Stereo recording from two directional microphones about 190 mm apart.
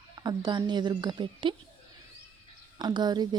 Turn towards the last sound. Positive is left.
turn(degrees=-20)  # may be behind; listen again after turning